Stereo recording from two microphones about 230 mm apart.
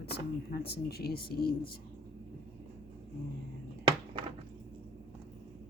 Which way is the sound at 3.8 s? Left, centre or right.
Right.